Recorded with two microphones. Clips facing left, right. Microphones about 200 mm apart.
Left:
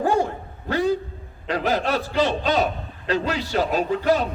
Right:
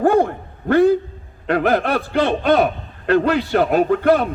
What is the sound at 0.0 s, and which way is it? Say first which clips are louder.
Dog: right 6 dB; 55° right (ahead or behind).